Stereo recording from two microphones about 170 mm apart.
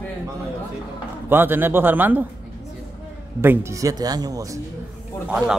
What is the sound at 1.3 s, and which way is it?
Speech, 10° right (ahead or behind).